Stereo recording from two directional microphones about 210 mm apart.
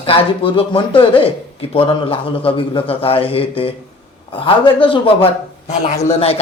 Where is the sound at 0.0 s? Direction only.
25° left (ahead or behind).